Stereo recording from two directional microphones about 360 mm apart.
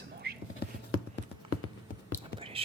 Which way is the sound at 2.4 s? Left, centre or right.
Centre.